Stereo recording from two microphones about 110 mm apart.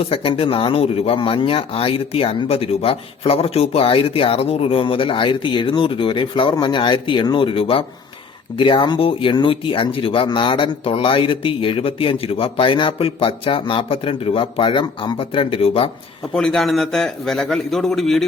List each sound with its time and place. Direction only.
0.0 s speech: 55° left (ahead or behind)
16.3 s a man's voice: 5° left (ahead or behind)